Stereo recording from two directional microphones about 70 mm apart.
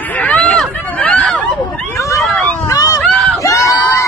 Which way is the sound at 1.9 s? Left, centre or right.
Left.